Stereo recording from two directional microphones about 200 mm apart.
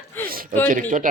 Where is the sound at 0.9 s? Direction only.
40° right (ahead or behind).